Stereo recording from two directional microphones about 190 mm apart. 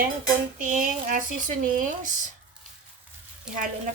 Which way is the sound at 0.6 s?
45° right (ahead or behind).